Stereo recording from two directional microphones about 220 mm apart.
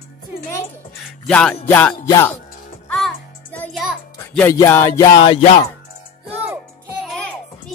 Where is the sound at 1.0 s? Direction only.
5° left (ahead or behind).